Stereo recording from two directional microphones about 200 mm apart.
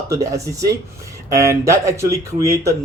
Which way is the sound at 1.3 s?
15° right (ahead or behind).